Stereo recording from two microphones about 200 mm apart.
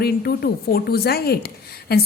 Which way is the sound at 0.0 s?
50° left (ahead or behind).